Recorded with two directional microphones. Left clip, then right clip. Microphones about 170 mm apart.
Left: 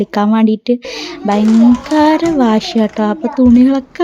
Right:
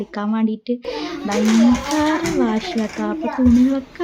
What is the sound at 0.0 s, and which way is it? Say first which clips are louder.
A woman's voice: left 10 dB; 45° left (ahead or behind).